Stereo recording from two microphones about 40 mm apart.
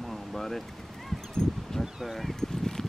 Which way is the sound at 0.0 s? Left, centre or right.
Centre.